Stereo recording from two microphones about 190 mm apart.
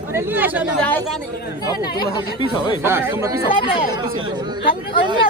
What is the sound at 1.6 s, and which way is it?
Speech, 20° left (ahead or behind).